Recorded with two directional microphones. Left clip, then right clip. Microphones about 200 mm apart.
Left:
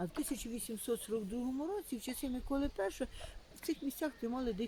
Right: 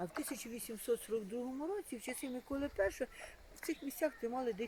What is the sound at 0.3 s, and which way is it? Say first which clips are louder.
Speech: left 2 dB; 40° left (ahead or behind).